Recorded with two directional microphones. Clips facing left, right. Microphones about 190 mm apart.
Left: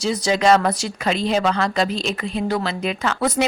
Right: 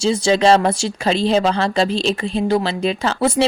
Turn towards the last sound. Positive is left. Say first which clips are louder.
# right 3 dB
turn(degrees=-30)  # may be behind; listen again after turning